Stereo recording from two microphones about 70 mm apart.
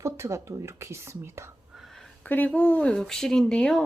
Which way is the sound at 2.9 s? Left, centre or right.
Centre.